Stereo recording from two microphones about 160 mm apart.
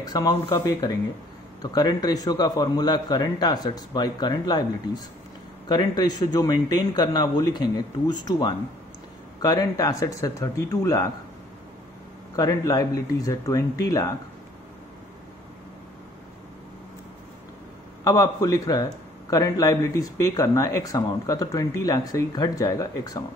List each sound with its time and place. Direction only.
0.0 s speech: 25° left (ahead or behind)
12.4 s speech: 25° left (ahead or behind)
18.0 s speech: 25° left (ahead or behind)